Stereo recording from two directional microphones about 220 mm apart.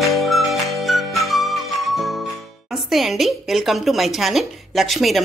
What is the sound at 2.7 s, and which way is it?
A woman's voice, centre (ahead or behind).